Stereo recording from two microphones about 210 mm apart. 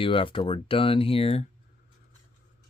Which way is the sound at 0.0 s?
25° left (ahead or behind).